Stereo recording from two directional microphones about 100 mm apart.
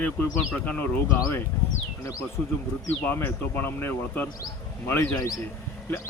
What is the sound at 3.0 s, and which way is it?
Speech, 20° left (ahead or behind).